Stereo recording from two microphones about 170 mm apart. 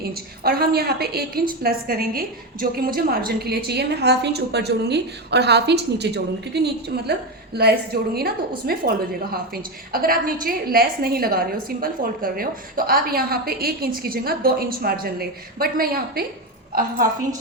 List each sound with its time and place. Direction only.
0.0 s a woman's voice: 65° right (ahead or behind)
9.9 s a woman's voice: 60° right (ahead or behind)